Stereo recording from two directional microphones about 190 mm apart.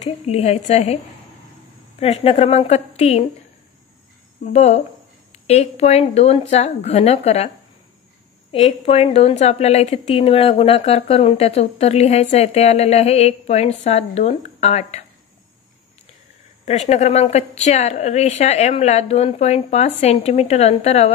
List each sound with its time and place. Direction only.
0.0 s a woman's voice: 35° left (ahead or behind)
2.0 s a woman's voice: 35° left (ahead or behind)
4.4 s a woman's voice: 35° left (ahead or behind)
16.6 s a woman's voice: 35° left (ahead or behind)